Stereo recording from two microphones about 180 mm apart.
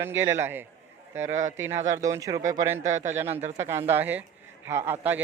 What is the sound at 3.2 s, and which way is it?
Speech, 40° right (ahead or behind).